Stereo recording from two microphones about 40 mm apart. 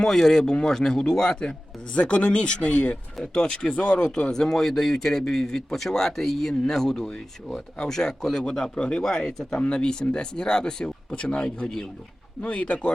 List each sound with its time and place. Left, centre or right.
0.0 s a man's voice: centre
8.7 s a man's voice: left
12.4 s speech: left